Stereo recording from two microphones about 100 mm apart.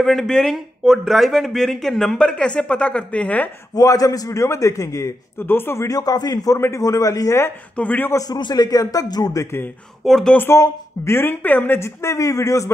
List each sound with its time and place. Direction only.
0.0 s speech: 5° left (ahead or behind)
3.7 s a man's voice: 35° left (ahead or behind)
7.7 s a man's voice: 15° left (ahead or behind)
8.1 s a man's voice: 35° left (ahead or behind)
10.0 s speech: centre (ahead or behind)
10.3 s speech: 20° left (ahead or behind)